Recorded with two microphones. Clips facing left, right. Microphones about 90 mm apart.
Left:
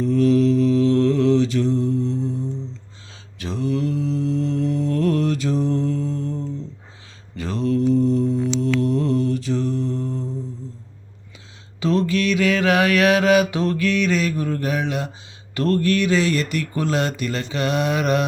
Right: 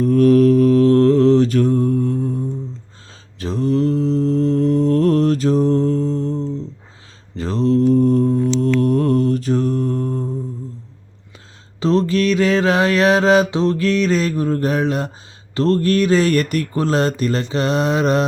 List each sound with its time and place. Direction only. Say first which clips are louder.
0.0 s mantra: right 5 dB; 50° right (ahead or behind)
3.3 s mantra: right 5 dB; 40° right (ahead or behind)
11.8 s mantra: right 4 dB; 35° right (ahead or behind)
13.8 s mantra: right 3 dB; 35° right (ahead or behind)
16.7 s mantra: right 4 dB; 35° right (ahead or behind)